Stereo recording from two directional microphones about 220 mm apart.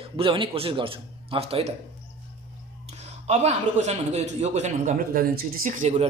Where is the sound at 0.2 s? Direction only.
25° right (ahead or behind).